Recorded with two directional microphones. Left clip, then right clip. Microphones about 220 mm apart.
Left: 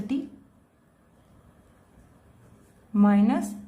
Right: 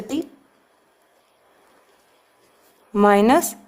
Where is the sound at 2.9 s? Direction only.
40° right (ahead or behind).